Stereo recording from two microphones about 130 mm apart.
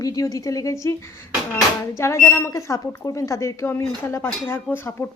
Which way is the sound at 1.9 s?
20° left (ahead or behind).